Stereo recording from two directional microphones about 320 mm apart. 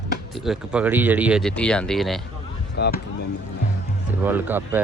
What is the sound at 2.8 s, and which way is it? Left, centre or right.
Speech, left.